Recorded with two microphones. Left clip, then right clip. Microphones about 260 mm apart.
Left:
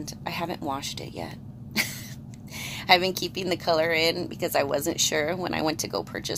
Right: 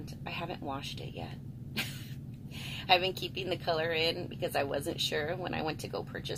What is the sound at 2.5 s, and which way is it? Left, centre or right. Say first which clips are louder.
A woman's voice: left 7 dB; left.